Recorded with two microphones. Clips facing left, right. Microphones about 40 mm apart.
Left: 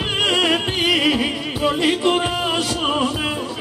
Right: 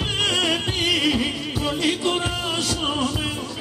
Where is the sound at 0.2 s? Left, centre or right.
Left.